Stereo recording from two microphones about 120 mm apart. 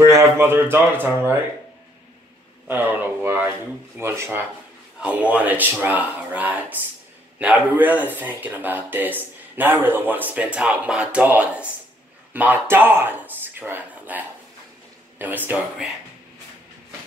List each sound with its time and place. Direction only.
0.1 s speech: 20° right (ahead or behind)
2.7 s speech: 15° right (ahead or behind)
5.0 s speech: 10° right (ahead or behind)